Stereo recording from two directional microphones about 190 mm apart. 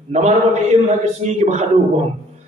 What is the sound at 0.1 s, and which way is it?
A man's voice, 35° right (ahead or behind).